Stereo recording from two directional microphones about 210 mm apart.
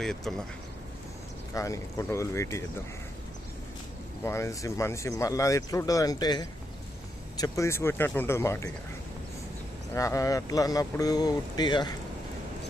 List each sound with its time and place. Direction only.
0.0 s speech: 5° left (ahead or behind)
1.5 s speech: 15° left (ahead or behind)
4.2 s speech: 10° left (ahead or behind)
9.9 s speech: 15° left (ahead or behind)